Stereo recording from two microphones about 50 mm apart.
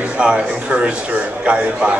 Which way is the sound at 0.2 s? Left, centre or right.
Centre.